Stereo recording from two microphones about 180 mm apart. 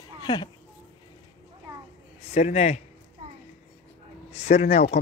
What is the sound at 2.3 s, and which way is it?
Speech, 40° left (ahead or behind).